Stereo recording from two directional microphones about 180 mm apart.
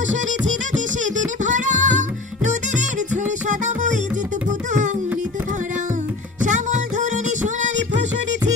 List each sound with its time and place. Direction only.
0.0 s music: 45° right (ahead or behind)
6.4 s music: 40° right (ahead or behind)